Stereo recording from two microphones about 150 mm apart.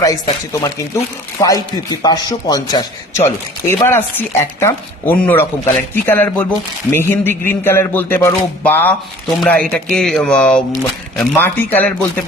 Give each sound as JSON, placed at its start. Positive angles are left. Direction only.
{"t": 0.0, "sound": "a man's voice", "side_deg": 20}